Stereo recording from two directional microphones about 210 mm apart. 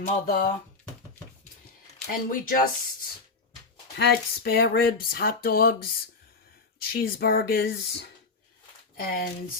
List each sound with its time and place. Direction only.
0.0 s speech: 35° left (ahead or behind)
2.3 s speech: 40° left (ahead or behind)
3.9 s speech: 50° left (ahead or behind)